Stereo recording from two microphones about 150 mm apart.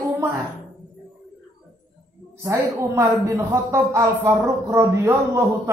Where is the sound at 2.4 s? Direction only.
20° right (ahead or behind).